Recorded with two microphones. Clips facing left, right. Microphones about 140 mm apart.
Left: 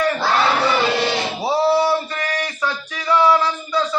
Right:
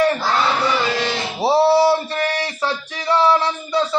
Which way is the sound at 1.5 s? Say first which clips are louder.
Right 3 dB; 30° right (ahead or behind).